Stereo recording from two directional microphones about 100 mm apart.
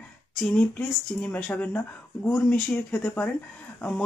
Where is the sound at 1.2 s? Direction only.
20° left (ahead or behind).